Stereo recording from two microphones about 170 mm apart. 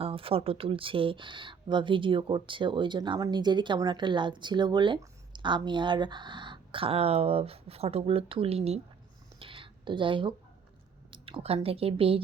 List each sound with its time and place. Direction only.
0.0 s speech: 35° right (ahead or behind)
9.4 s a sound: 30° right (ahead or behind)
11.1 s speech: 30° right (ahead or behind)